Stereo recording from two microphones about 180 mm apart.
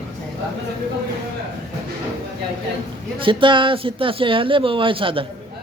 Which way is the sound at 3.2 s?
30° right (ahead or behind).